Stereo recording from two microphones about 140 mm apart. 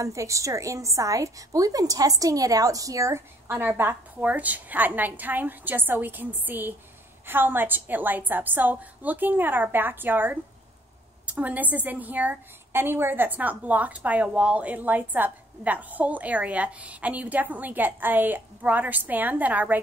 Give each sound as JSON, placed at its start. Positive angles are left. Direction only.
{"t": 0.0, "sound": "a woman's voice", "side_deg": -20}